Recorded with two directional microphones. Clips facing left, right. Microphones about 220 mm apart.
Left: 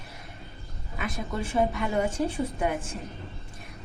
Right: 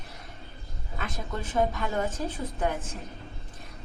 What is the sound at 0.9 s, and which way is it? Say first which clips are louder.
A woman's voice: left 3 dB; 10° left (ahead or behind).